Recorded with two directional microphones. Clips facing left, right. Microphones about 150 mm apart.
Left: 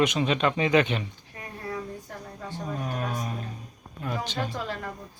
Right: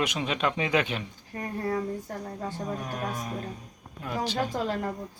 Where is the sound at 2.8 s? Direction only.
Centre (ahead or behind).